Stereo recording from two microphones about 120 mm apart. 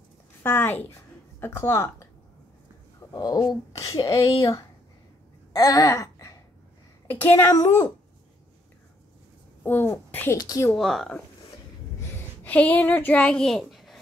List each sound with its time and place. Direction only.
0.4 s speech: 20° left (ahead or behind)
3.1 s a woman's voice: 30° left (ahead or behind)
5.5 s a sound: 30° left (ahead or behind)
7.1 s speech: 20° left (ahead or behind)
9.7 s a woman's voice: 15° left (ahead or behind)
10.3 s a woman's voice: 30° left (ahead or behind)
10.8 s speech: centre (ahead or behind)
12.4 s a woman's voice: 15° left (ahead or behind)